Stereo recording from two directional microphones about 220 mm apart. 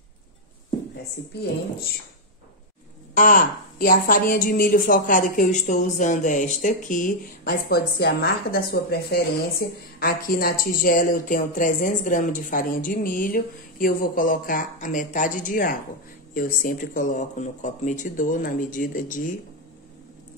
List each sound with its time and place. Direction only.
3.2 s a woman's voice: 35° left (ahead or behind)